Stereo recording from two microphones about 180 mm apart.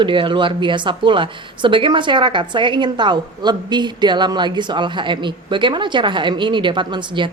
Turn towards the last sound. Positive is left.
turn(degrees=-25)  # may be behind; listen again after turning